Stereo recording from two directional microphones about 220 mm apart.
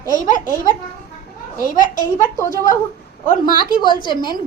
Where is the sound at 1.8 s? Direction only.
35° left (ahead or behind).